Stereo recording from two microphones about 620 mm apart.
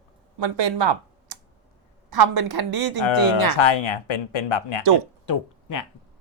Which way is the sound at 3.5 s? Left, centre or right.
Left.